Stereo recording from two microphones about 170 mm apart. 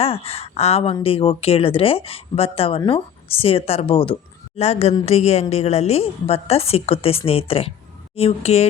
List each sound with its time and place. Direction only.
0.0 s speech: 35° left (ahead or behind)